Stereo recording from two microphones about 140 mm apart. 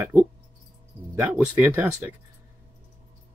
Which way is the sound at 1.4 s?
15° right (ahead or behind).